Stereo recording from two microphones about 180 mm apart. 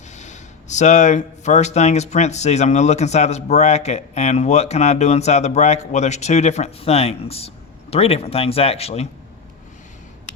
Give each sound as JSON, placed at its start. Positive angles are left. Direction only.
{"t": 0.1, "sound": "speech", "side_deg": 40}